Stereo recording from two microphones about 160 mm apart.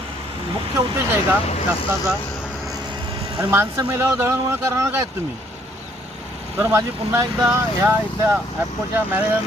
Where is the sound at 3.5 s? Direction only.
15° right (ahead or behind).